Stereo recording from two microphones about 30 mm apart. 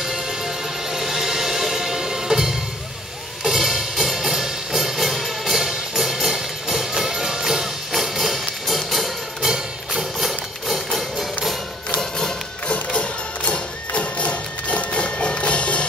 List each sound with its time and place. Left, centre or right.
0.8 s music: centre
7.9 s music: centre
9.4 s music: centre
11.0 s music: centre
12.9 s music: left